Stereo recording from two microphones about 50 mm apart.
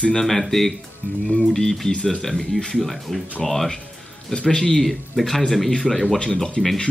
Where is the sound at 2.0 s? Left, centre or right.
Centre.